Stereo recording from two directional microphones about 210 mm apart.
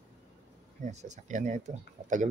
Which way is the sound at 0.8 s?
35° right (ahead or behind).